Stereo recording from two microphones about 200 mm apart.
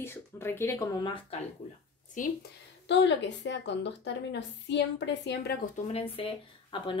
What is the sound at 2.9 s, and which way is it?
A woman's voice, 60° left (ahead or behind).